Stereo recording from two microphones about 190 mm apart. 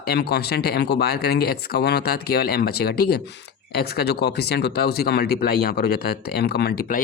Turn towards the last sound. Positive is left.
turn(degrees=55)  # may be behind; listen again after turning